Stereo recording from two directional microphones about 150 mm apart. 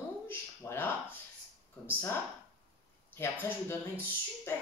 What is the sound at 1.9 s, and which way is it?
Speech, 15° left (ahead or behind).